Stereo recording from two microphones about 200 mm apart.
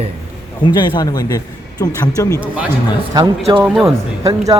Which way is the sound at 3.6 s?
Centre (ahead or behind).